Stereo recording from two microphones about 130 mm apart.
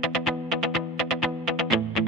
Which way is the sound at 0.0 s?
Centre (ahead or behind).